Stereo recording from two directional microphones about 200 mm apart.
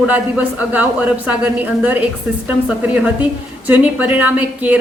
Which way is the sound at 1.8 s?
10° right (ahead or behind).